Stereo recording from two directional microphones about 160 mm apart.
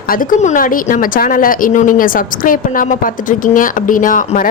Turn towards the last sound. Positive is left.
turn(degrees=55)  # may be behind; listen again after turning